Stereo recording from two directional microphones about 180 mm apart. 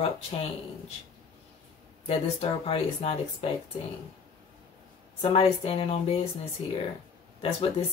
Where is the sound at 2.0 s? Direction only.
35° left (ahead or behind).